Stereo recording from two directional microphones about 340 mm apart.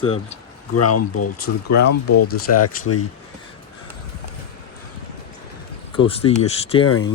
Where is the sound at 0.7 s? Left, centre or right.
Left.